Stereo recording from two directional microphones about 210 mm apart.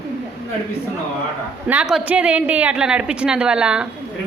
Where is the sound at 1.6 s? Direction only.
5° right (ahead or behind).